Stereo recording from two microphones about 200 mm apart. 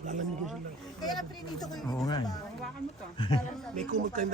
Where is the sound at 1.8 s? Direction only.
20° left (ahead or behind).